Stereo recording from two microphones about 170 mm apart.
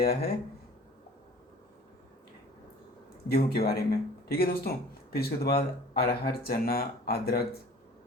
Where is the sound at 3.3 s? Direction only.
65° left (ahead or behind).